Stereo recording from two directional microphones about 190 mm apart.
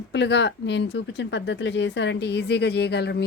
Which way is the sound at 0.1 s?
65° left (ahead or behind).